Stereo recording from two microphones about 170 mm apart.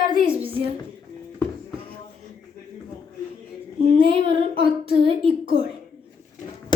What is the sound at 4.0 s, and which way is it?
Child singing, 30° right (ahead or behind).